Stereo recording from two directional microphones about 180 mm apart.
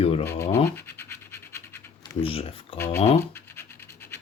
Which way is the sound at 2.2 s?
30° left (ahead or behind).